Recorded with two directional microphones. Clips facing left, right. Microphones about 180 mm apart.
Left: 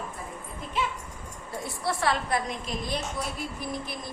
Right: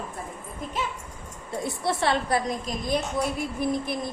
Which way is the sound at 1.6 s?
20° right (ahead or behind).